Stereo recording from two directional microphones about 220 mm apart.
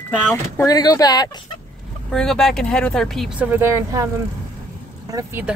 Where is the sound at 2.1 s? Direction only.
Centre (ahead or behind).